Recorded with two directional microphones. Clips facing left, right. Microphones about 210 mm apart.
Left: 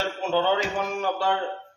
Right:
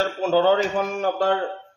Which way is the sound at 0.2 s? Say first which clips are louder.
Right 5 dB; 40° right (ahead or behind).